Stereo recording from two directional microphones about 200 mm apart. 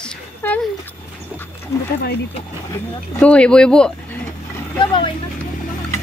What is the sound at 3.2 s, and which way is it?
Speech, 5° left (ahead or behind).